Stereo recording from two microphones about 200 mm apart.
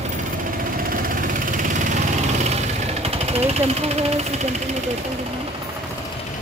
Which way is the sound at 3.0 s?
30° right (ahead or behind).